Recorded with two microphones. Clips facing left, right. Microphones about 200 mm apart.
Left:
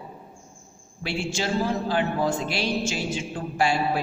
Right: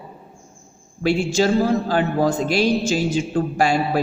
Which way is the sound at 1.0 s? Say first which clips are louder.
Right 10 dB; 40° right (ahead or behind).